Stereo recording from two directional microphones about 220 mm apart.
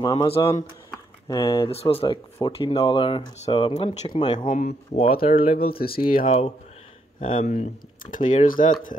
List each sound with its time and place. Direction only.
0.0 s speech: 20° left (ahead or behind)
4.5 s speech: 30° left (ahead or behind)
5.3 s speech: 40° left (ahead or behind)
6.2 s speech: 25° left (ahead or behind)